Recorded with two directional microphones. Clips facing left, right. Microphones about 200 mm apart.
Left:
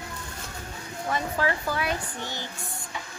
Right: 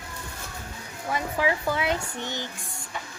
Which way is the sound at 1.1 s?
15° right (ahead or behind).